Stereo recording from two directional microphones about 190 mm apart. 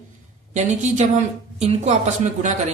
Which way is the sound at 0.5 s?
40° right (ahead or behind).